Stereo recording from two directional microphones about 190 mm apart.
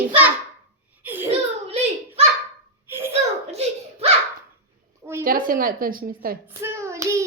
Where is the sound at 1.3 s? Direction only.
30° right (ahead or behind).